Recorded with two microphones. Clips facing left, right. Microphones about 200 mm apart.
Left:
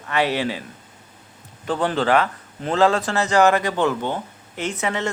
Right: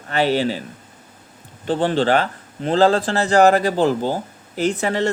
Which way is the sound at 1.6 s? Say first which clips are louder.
Right 3 dB; 30° right (ahead or behind).